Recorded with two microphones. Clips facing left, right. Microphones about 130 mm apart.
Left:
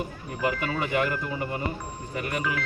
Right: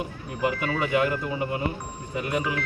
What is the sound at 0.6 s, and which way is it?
Speech, centre (ahead or behind).